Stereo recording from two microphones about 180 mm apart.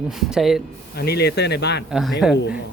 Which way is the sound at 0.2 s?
Centre (ahead or behind).